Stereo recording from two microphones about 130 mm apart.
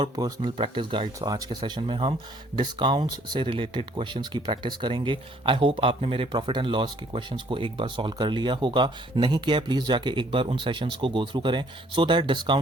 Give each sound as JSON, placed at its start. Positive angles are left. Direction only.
{"t": 0.0, "sound": "speech", "side_deg": -35}